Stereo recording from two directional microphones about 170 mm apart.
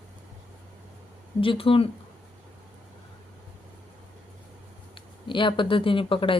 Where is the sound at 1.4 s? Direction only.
30° left (ahead or behind).